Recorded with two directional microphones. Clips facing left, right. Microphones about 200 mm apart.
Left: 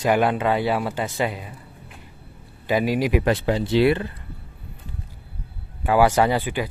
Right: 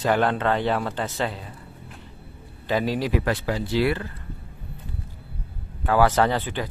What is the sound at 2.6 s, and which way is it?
Speech, 10° left (ahead or behind).